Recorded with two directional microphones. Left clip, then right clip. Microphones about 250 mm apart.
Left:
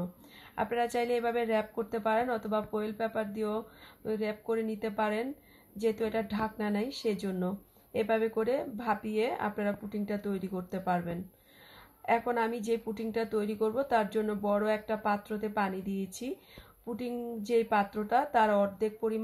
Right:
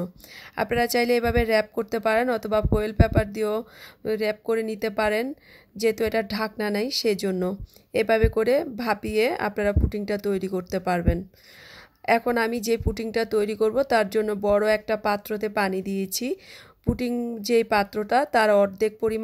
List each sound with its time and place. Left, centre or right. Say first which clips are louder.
0.0 s speech: right 8 dB; right
17.5 s speech: right 7 dB; right